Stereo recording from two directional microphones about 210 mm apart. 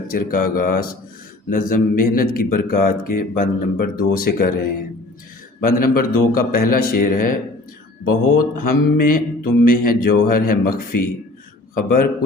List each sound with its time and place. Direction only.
0.1 s speech: 40° left (ahead or behind)
8.4 s speech: 45° left (ahead or behind)